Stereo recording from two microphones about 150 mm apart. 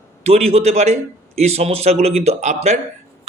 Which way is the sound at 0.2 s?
45° right (ahead or behind).